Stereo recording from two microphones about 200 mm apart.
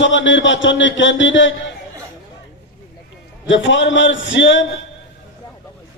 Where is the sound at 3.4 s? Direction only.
70° left (ahead or behind).